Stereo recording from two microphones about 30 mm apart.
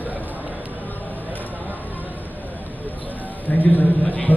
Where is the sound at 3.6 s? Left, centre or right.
Left.